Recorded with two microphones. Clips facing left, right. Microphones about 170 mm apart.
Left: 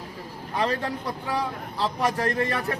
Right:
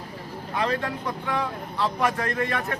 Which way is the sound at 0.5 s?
35° left (ahead or behind).